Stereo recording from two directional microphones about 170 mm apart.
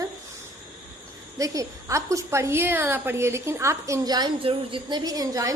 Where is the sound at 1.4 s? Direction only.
20° right (ahead or behind).